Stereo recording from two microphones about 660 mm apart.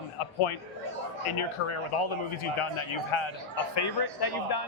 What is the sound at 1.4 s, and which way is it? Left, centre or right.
A man's voice, left.